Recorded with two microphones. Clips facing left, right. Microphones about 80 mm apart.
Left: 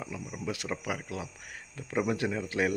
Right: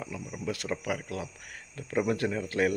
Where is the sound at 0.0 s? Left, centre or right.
Centre.